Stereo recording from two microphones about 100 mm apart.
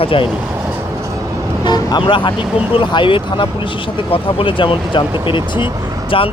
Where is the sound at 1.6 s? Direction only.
45° left (ahead or behind).